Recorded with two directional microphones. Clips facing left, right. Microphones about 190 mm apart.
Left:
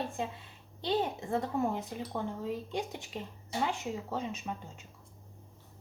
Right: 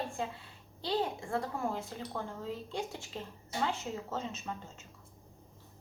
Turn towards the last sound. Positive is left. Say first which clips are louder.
# left 2 dB
turn(degrees=15)  # may be behind; listen again after turning